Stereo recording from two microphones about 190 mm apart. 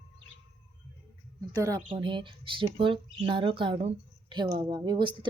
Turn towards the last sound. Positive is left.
turn(degrees=-25)  # may be behind; listen again after turning